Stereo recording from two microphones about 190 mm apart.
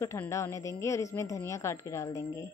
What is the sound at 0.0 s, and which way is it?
Speech, 15° left (ahead or behind).